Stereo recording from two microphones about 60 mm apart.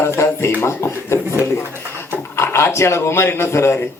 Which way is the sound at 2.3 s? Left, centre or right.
Left.